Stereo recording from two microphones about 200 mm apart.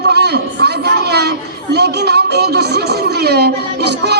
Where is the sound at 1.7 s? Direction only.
55° right (ahead or behind).